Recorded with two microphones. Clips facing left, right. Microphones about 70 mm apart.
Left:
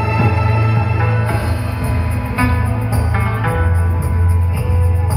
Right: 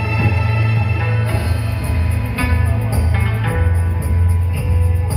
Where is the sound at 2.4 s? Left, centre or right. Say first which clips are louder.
Left 4 dB; left.